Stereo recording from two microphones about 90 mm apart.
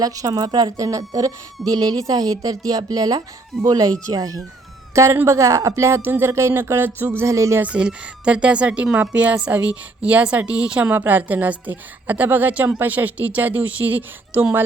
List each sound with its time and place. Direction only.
0.0 s a woman's voice: 45° right (ahead or behind)
5.1 s speech: 35° right (ahead or behind)
7.6 s a woman's voice: 10° right (ahead or behind)